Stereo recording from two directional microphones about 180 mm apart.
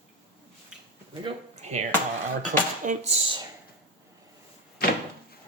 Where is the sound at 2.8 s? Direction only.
35° right (ahead or behind).